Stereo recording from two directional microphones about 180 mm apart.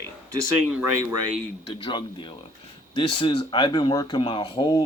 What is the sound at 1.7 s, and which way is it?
Speech, 25° left (ahead or behind).